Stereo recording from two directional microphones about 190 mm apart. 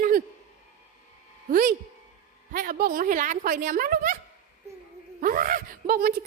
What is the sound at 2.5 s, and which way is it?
A woman's voice, 50° right (ahead or behind).